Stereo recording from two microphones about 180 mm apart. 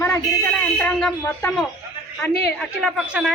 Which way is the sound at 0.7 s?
10° left (ahead or behind).